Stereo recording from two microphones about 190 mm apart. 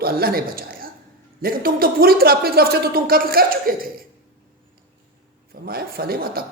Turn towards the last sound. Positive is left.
turn(degrees=-55)  # may be behind; listen again after turning